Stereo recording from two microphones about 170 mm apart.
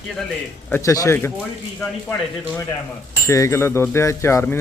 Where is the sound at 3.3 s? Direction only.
15° left (ahead or behind).